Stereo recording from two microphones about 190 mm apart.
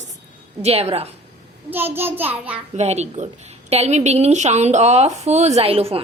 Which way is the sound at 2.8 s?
35° right (ahead or behind).